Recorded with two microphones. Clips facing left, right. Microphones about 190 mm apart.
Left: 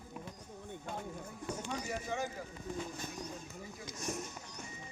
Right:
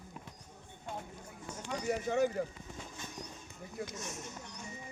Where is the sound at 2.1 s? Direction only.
60° right (ahead or behind).